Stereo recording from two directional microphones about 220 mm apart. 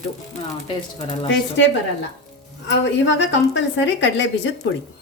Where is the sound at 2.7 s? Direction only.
55° left (ahead or behind).